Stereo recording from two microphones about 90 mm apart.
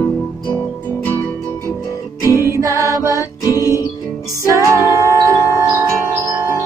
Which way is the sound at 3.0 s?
40° left (ahead or behind).